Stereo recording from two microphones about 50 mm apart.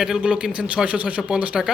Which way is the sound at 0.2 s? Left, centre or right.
Right.